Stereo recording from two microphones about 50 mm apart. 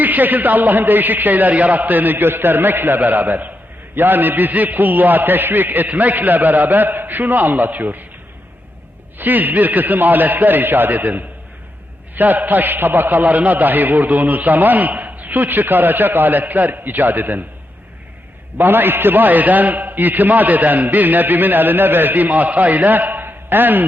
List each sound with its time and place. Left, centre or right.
0.0 s a man's voice: right
9.1 s a man's voice: right
18.5 s a man's voice: right